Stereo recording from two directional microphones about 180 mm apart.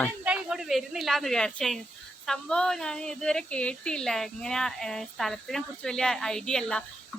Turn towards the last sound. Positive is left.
turn(degrees=5)  # may be behind; listen again after turning